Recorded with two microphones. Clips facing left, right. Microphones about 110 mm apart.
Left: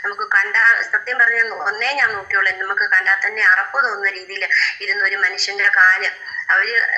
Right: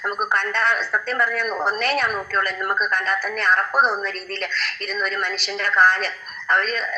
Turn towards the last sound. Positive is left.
turn(degrees=-55)  # may be behind; listen again after turning